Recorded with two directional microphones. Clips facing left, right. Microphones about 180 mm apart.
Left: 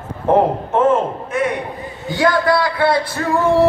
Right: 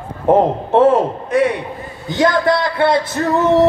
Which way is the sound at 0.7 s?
35° right (ahead or behind).